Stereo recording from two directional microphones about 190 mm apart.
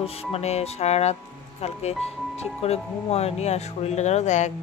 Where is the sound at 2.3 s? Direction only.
35° left (ahead or behind).